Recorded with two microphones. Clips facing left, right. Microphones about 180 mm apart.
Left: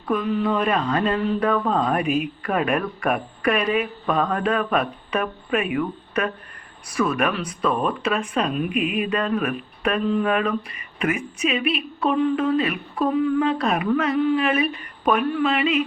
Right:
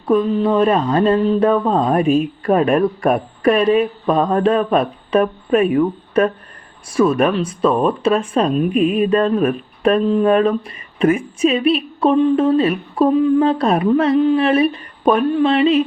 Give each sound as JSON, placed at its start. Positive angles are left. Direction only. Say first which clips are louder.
{"t": 0.0, "sound": "speech", "louder": "right 7 dB", "side_deg": -25}